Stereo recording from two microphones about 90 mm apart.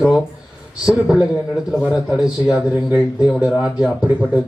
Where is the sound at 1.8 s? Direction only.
10° right (ahead or behind).